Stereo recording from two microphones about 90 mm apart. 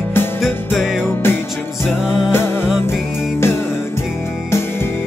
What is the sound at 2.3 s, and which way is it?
Music, 25° left (ahead or behind).